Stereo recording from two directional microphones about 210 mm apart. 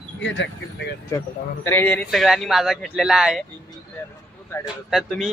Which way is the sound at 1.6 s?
10° left (ahead or behind).